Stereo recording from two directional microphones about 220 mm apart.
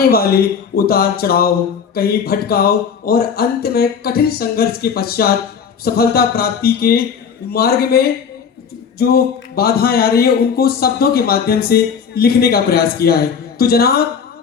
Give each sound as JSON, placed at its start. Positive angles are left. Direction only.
{"t": 0.0, "sound": "speech", "side_deg": 45}